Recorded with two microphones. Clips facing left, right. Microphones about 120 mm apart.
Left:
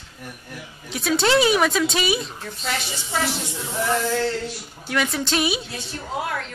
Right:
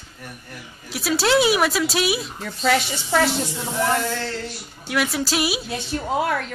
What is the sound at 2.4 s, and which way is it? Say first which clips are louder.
Speech: right 8 dB; 60° right (ahead or behind).